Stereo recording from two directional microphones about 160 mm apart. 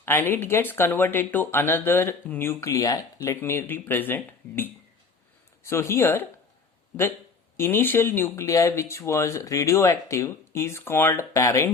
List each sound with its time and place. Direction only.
0.0 s speech: 15° left (ahead or behind)
7.5 s speech: 15° left (ahead or behind)